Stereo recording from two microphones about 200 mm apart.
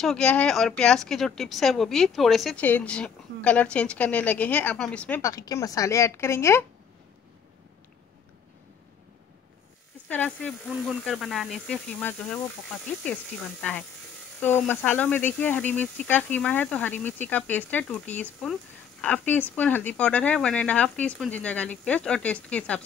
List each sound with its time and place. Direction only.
0.0 s speech: 5° left (ahead or behind)
10.0 s speech: 10° left (ahead or behind)